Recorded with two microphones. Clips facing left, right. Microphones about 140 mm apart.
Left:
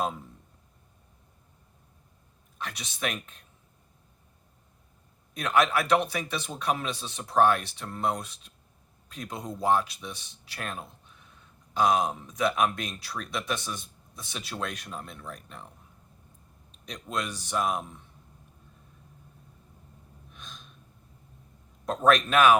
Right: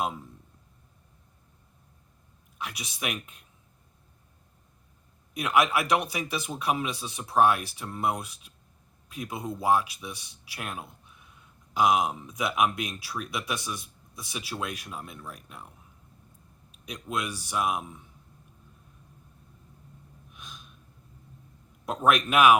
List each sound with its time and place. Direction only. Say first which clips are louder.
2.6 s speech: left 2 dB; 10° right (ahead or behind)
5.3 s speech: even; 10° right (ahead or behind)
16.7 s speech: right 1 dB; 5° right (ahead or behind)
20.3 s gasp: even; 10° right (ahead or behind)
21.8 s speech: left 1 dB; 10° right (ahead or behind)